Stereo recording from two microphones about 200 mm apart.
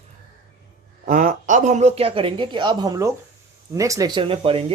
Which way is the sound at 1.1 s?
40° right (ahead or behind).